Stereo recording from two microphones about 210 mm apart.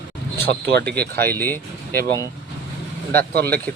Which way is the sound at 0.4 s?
50° right (ahead or behind).